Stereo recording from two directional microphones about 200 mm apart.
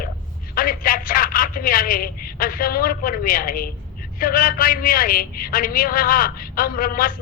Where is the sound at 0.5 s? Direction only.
45° left (ahead or behind).